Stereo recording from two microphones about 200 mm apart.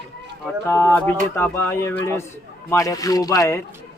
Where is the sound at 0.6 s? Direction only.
10° left (ahead or behind).